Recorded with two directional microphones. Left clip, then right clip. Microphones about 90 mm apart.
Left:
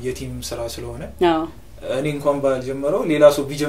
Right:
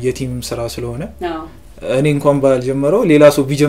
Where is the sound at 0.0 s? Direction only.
40° right (ahead or behind).